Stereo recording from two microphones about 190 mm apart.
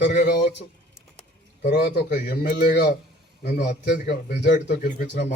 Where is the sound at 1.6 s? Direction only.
60° left (ahead or behind).